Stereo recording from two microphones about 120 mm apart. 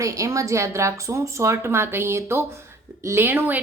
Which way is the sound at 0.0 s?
25° right (ahead or behind).